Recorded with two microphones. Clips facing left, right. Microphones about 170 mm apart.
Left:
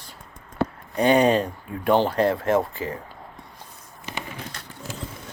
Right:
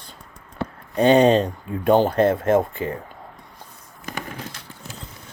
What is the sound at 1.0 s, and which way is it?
Speech, 25° right (ahead or behind).